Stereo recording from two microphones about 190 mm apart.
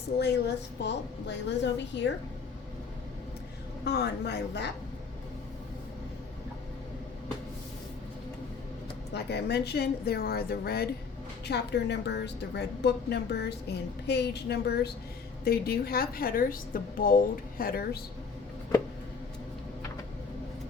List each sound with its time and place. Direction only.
0.2 s a woman's voice: 60° left (ahead or behind)
3.8 s a woman's voice: 60° left (ahead or behind)
9.1 s a woman's voice: 60° left (ahead or behind)